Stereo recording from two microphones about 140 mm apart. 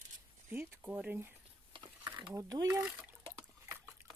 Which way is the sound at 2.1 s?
30° right (ahead or behind).